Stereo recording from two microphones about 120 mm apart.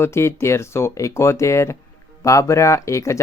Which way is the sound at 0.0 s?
20° left (ahead or behind).